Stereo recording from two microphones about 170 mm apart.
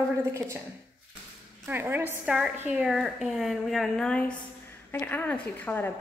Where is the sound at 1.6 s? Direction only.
10° right (ahead or behind).